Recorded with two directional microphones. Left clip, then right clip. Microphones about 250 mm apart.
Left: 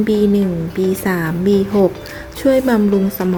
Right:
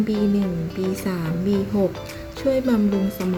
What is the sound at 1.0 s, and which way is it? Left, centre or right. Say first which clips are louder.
Speech: left 9 dB; centre.